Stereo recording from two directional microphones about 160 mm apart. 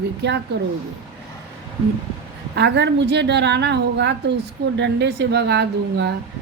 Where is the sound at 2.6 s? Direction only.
90° right.